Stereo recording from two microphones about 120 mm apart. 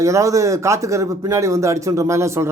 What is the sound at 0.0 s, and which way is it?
Speech, 25° right (ahead or behind).